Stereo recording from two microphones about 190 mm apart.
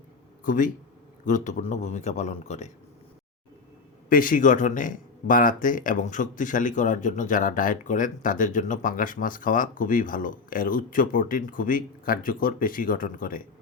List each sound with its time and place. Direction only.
0.4 s a man's voice: 45° left (ahead or behind)
4.1 s speech: 45° left (ahead or behind)